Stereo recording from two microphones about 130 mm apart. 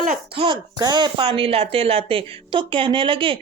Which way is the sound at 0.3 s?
40° right (ahead or behind).